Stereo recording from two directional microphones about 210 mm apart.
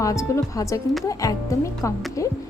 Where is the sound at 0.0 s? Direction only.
15° left (ahead or behind).